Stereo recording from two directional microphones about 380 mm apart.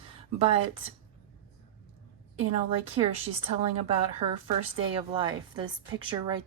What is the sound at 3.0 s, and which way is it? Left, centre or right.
A woman's voice, centre.